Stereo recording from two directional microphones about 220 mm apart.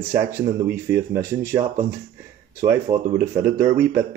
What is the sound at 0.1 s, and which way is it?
Speech, 10° right (ahead or behind).